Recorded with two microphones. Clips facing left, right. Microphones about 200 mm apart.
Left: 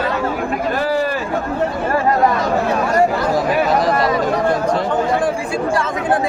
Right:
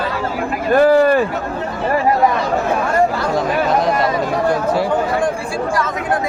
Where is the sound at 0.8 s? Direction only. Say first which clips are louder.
Right 11 dB; 55° right (ahead or behind).